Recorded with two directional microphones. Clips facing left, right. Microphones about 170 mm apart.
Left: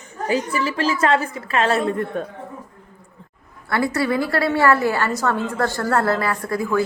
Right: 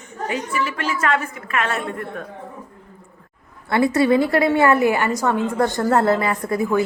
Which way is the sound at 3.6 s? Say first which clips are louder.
Right 4 dB; 20° right (ahead or behind).